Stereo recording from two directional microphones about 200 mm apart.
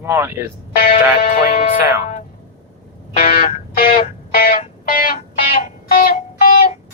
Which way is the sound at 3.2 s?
45° left (ahead or behind).